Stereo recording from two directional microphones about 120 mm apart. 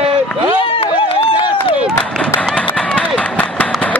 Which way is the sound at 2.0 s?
10° left (ahead or behind).